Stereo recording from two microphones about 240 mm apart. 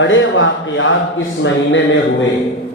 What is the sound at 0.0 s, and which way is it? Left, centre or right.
Speech, left.